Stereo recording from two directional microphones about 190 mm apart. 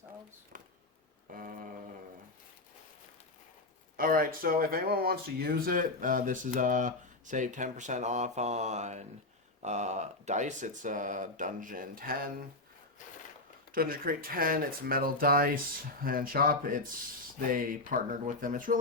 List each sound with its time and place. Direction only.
0.5 s a sound: 45° right (ahead or behind)
3.9 s speech: 50° right (ahead or behind)
13.7 s speech: 50° right (ahead or behind)